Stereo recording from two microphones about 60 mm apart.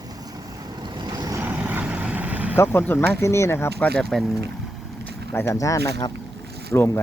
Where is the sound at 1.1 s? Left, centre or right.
Right.